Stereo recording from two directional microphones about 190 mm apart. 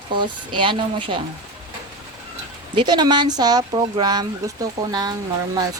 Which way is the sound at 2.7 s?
20° right (ahead or behind).